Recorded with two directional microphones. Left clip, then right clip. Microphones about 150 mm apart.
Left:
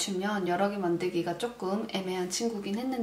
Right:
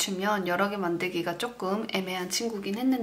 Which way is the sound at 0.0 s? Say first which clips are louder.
Right 3 dB; 20° right (ahead or behind).